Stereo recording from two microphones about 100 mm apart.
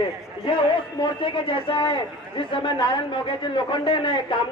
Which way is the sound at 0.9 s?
55° left (ahead or behind).